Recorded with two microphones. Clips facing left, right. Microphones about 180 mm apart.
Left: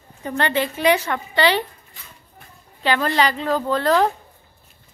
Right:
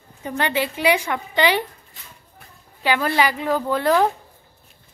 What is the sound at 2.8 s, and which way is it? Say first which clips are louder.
A woman's voice: even; 10° right (ahead or behind).